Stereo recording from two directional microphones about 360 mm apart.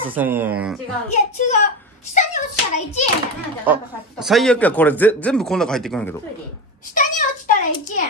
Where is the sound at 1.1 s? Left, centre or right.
Centre.